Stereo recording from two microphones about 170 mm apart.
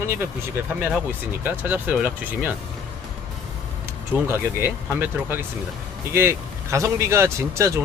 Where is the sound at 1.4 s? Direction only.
10° right (ahead or behind).